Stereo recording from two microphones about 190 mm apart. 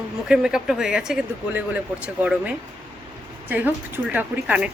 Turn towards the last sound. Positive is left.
turn(degrees=-5)  # may be behind; listen again after turning